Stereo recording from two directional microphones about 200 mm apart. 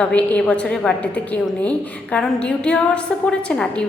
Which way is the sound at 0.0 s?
5° left (ahead or behind).